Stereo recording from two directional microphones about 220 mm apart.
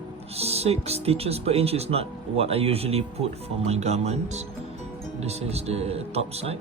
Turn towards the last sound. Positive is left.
turn(degrees=-30)  # may be behind; listen again after turning